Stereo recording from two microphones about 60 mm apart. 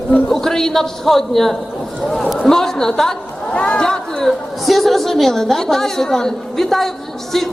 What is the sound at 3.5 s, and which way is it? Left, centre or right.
Speech, left.